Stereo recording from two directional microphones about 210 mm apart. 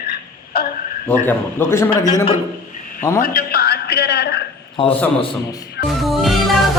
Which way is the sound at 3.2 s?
45° left (ahead or behind).